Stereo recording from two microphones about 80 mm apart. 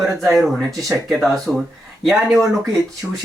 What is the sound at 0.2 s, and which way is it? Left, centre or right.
Speech, centre.